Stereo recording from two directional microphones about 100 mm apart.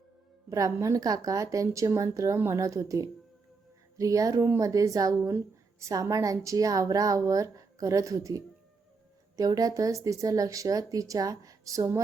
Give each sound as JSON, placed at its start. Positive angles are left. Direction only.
{"t": 0.5, "sound": "speech", "side_deg": -30}